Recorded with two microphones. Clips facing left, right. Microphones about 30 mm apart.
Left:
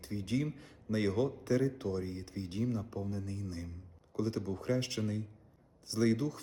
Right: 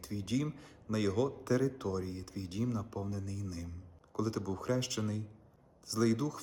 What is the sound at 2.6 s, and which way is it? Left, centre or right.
A man's voice, left.